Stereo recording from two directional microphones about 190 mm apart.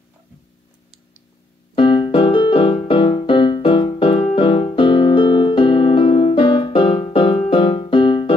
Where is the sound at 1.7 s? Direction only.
25° left (ahead or behind).